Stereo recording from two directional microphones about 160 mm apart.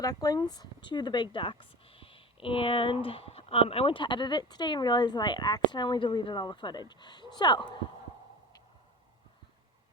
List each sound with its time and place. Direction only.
0.0 s speech: 25° left (ahead or behind)